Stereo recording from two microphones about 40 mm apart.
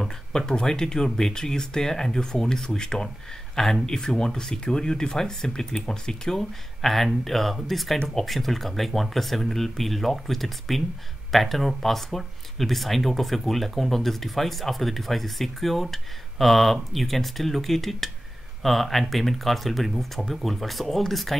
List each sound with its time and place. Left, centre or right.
0.3 s speech: centre
6.8 s speech: centre